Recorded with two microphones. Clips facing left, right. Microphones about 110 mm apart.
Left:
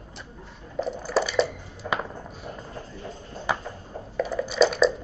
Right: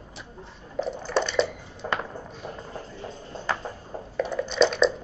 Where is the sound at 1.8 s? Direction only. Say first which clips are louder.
Even; 40° right (ahead or behind).